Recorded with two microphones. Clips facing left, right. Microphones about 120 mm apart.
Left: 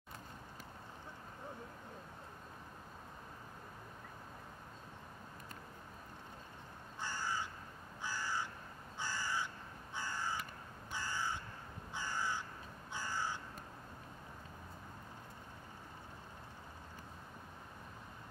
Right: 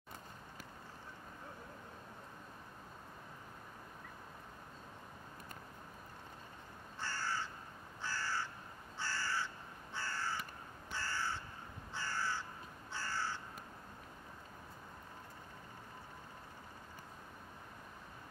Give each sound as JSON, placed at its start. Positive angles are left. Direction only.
{"t": 7.0, "sound": "crow", "side_deg": 15}